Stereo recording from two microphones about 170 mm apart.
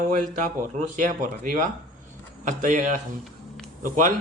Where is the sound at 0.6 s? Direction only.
50° right (ahead or behind).